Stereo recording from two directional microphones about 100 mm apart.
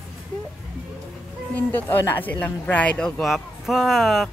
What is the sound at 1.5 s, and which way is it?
Speech, 15° left (ahead or behind).